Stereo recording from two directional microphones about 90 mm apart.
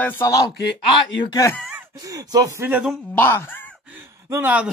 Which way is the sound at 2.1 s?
40° right (ahead or behind).